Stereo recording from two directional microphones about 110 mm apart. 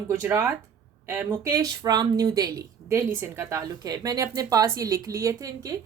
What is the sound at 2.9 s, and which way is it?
Speech, 20° right (ahead or behind).